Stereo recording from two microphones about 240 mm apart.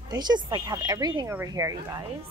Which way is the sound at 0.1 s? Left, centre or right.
Centre.